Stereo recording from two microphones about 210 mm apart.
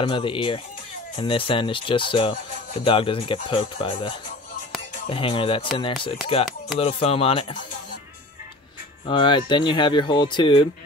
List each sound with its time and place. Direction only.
0.0 s speech: 25° left (ahead or behind)
9.0 s speech: 25° left (ahead or behind)